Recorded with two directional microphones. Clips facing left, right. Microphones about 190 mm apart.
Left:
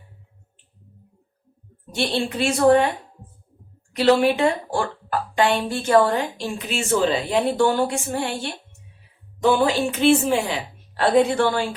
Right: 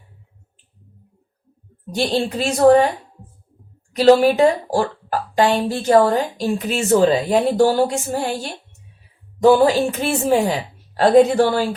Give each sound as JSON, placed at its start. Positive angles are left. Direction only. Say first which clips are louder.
{"t": 1.9, "sound": "speech", "louder": "right 4 dB", "side_deg": -40}
{"t": 3.9, "sound": "speech", "louder": "right 5 dB", "side_deg": -40}
{"t": 9.4, "sound": "speech", "louder": "right 6 dB", "side_deg": -40}